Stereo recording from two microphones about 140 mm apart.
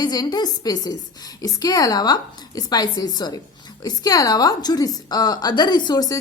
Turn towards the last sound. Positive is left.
turn(degrees=30)  # may be behind; listen again after turning